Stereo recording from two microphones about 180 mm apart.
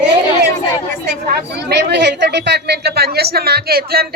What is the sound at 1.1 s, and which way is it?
A woman's voice, 70° right (ahead or behind).